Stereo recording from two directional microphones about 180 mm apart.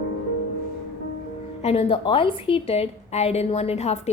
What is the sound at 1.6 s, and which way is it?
A woman's voice, 35° left (ahead or behind).